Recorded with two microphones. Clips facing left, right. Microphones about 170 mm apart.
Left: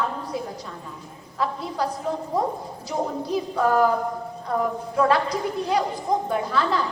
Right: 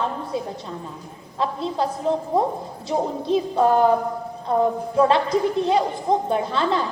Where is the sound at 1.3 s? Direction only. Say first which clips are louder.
Right 3 dB; 25° right (ahead or behind).